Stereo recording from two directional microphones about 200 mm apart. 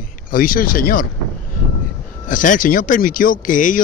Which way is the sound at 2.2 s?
40° left (ahead or behind).